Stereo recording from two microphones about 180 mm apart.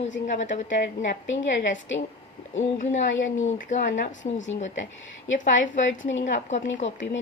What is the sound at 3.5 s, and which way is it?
Speech, 45° left (ahead or behind).